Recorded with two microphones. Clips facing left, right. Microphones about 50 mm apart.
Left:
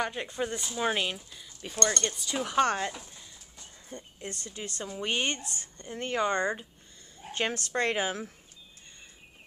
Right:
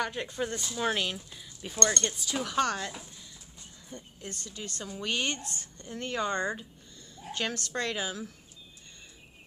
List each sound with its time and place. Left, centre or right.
0.0 s speech: centre
1.3 s speech: centre
2.4 s speech: left
3.9 s speech: left
7.2 s speech: left